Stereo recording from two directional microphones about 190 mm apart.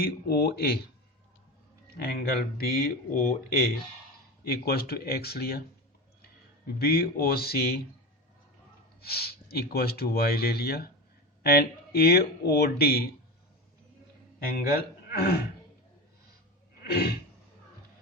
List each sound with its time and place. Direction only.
0.0 s speech: 55° left (ahead or behind)
2.6 s speech: 55° left (ahead or behind)
6.7 s speech: 55° left (ahead or behind)
9.0 s speech: 55° left (ahead or behind)
14.3 s speech: 50° left (ahead or behind)
16.8 s a sound: 55° left (ahead or behind)